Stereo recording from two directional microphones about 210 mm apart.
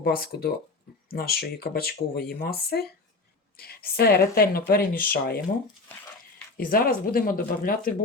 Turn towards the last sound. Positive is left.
turn(degrees=40)  # may be behind; listen again after turning